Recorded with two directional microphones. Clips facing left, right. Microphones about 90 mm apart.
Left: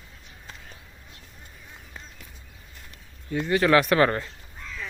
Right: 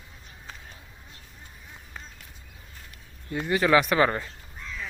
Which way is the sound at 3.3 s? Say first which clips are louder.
Left 1 dB; 5° right (ahead or behind).